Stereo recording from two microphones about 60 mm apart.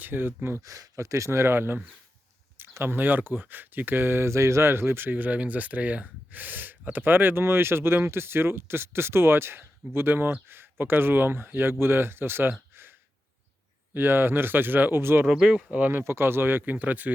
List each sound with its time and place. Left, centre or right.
0.0 s speech: right
0.6 s speech: right
12.7 s sigh: right
13.9 s speech: right
15.4 s speech: right
15.9 s speech: right